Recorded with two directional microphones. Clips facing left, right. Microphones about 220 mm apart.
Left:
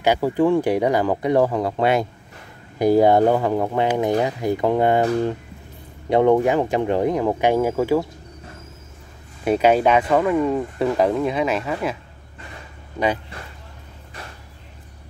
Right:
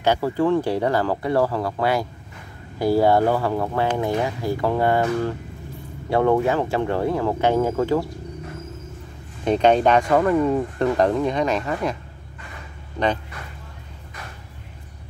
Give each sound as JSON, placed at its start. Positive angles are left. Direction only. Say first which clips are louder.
{"t": 0.0, "sound": "speech", "louder": "left 2 dB", "side_deg": 15}
{"t": 6.0, "sound": "speech", "louder": "left 3 dB", "side_deg": 20}
{"t": 9.4, "sound": "speech", "louder": "even", "side_deg": 5}